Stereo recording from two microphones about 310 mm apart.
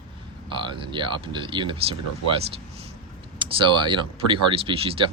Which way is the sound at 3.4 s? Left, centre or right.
Centre.